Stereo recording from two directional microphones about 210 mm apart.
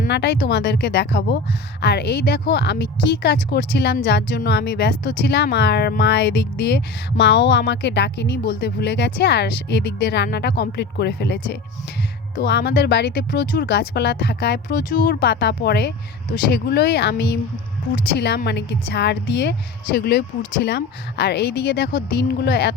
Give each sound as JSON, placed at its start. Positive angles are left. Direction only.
{"t": 0.1, "sound": "speech", "side_deg": 55}